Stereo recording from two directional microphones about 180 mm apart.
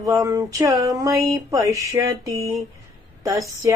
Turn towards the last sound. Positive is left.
turn(degrees=-20)  # may be behind; listen again after turning